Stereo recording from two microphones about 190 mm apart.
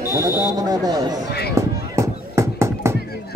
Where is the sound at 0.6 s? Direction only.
20° right (ahead or behind).